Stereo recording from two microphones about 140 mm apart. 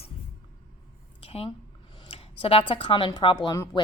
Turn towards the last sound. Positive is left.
turn(degrees=25)  # may be behind; listen again after turning